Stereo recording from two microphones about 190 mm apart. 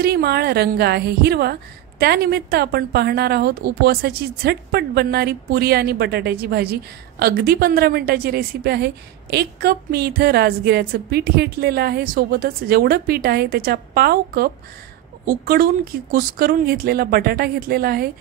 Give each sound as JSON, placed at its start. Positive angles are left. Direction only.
{"t": 0.0, "sound": "a woman's voice", "side_deg": -55}